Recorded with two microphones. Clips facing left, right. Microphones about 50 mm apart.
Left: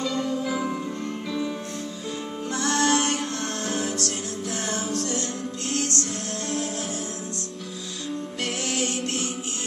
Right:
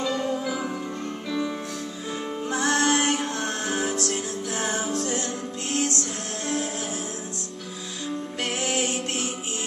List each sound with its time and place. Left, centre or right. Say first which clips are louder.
0.0 s music: right 1 dB; centre
0.4 s music: left 2 dB; centre
2.5 s music: even; centre
8.6 s music: right 1 dB; centre